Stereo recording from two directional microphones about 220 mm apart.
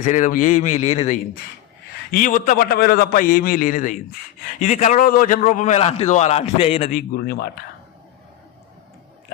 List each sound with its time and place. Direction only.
0.0 s a man's voice: 35° left (ahead or behind)
6.9 s a man's voice: 45° left (ahead or behind)